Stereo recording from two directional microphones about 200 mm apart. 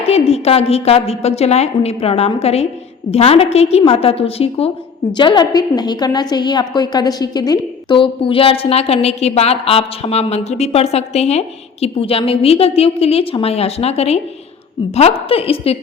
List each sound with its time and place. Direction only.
0.0 s a woman's voice: 30° left (ahead or behind)